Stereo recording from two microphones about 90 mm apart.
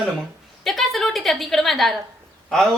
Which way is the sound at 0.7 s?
5° left (ahead or behind).